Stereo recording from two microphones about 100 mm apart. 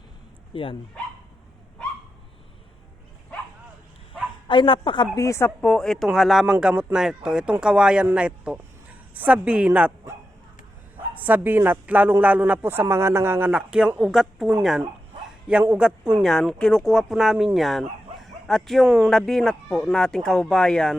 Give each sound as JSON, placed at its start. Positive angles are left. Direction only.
{"t": 0.5, "sound": "speech", "side_deg": 60}
{"t": 4.4, "sound": "speech", "side_deg": 50}
{"t": 5.1, "sound": "speech", "side_deg": 30}
{"t": 5.6, "sound": "speech", "side_deg": 10}
{"t": 11.2, "sound": "a woman's voice", "side_deg": -15}
{"t": 16.2, "sound": "speech", "side_deg": 0}
{"t": 19.1, "sound": "speech", "side_deg": 5}